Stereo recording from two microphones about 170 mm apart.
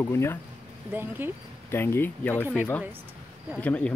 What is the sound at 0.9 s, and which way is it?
Speech, 10° right (ahead or behind).